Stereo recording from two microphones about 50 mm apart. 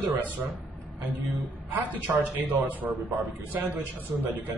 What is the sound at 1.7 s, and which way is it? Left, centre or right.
A man's voice, right.